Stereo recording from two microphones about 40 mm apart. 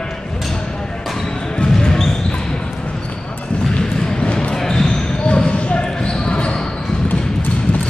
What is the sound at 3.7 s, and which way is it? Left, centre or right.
Basketball bounce, left.